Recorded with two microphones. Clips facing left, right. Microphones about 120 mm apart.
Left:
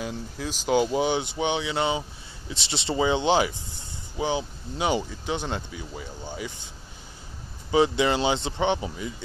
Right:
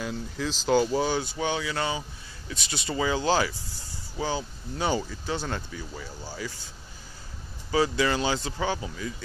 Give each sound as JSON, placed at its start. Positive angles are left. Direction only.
{"t": 0.0, "sound": "speech", "side_deg": 10}
{"t": 7.7, "sound": "speech", "side_deg": 20}